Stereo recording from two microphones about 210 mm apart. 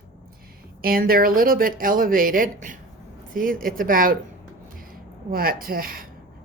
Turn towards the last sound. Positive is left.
turn(degrees=-45)  # may be behind; listen again after turning